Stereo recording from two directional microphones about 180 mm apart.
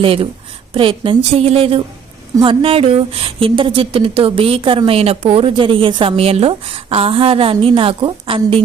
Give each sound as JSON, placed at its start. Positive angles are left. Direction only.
{"t": 0.0, "sound": "a woman's voice", "side_deg": -30}